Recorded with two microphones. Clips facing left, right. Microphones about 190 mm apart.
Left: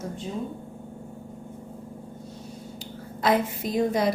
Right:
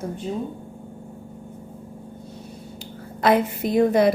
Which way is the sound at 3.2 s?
60° right (ahead or behind).